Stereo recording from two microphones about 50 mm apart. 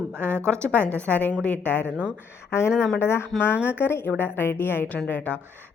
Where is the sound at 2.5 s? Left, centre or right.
Left.